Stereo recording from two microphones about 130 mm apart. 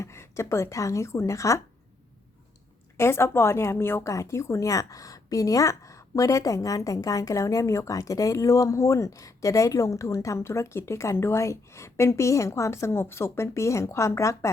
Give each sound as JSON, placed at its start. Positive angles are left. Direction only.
{"t": 0.0, "sound": "a woman's voice", "side_deg": 20}
{"t": 3.0, "sound": "a woman's voice", "side_deg": 20}